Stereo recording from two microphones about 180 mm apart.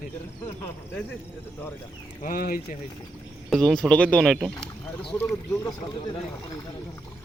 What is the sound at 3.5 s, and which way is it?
Speech, centre (ahead or behind).